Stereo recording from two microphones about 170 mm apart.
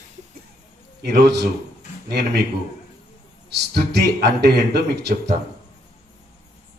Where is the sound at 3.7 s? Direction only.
75° right (ahead or behind).